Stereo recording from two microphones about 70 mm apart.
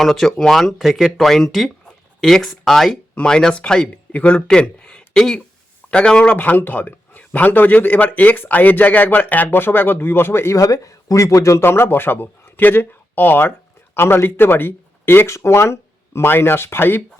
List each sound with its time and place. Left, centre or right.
0.0 s a man's voice: centre; by 17.0 s left